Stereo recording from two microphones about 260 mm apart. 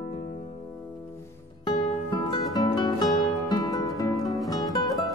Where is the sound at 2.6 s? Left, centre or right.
Centre.